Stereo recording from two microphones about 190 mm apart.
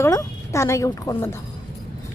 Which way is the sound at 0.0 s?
15° left (ahead or behind).